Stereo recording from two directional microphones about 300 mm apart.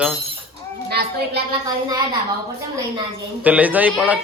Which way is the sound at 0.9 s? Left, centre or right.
Right.